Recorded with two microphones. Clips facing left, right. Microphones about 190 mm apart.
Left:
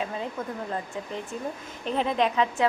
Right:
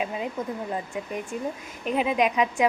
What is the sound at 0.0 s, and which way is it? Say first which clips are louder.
A woman's voice: right 2 dB; 15° right (ahead or behind).